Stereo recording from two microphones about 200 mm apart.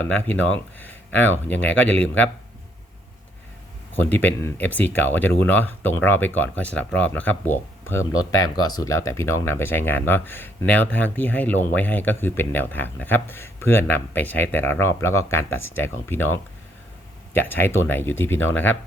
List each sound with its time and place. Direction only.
0.8 s speech: 10° left (ahead or behind)
3.9 s speech: 10° left (ahead or behind)
17.5 s speech: 10° left (ahead or behind)